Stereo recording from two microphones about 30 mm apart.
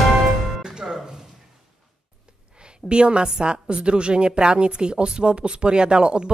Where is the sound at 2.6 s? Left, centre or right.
Right.